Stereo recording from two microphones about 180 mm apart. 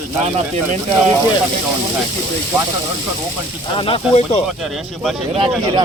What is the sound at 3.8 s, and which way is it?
Speech, 30° left (ahead or behind).